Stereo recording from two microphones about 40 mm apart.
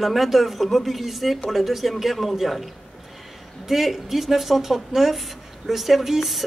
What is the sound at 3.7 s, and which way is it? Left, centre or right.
Speech, centre.